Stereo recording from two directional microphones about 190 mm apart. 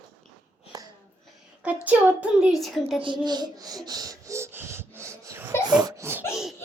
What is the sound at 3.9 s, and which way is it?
Gasp, 20° right (ahead or behind).